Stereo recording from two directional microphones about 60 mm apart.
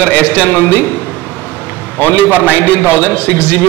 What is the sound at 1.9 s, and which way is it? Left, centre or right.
A man's voice, left.